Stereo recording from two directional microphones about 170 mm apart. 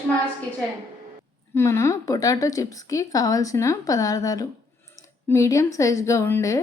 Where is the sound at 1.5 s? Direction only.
15° left (ahead or behind).